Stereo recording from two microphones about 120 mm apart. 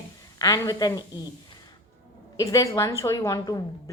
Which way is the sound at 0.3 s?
30° left (ahead or behind).